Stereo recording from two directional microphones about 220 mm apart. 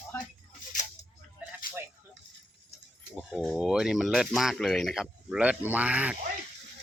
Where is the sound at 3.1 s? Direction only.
5° right (ahead or behind).